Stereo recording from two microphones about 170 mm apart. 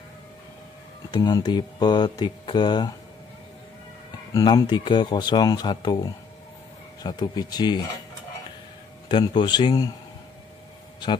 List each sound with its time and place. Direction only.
1.1 s speech: 25° left (ahead or behind)
4.3 s speech: 20° left (ahead or behind)
7.0 s speech: 25° left (ahead or behind)
9.1 s speech: 25° left (ahead or behind)